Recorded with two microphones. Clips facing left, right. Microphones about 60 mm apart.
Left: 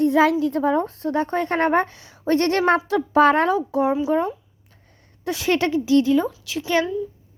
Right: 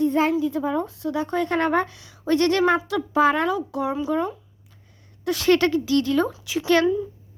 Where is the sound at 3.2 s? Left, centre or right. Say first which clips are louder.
Left 3 dB; left.